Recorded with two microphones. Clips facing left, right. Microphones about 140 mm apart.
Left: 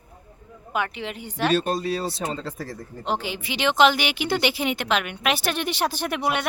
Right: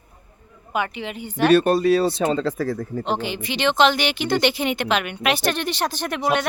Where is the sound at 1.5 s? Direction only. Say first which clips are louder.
Right 9 dB; 65° right (ahead or behind); by 2.5 s 90° right.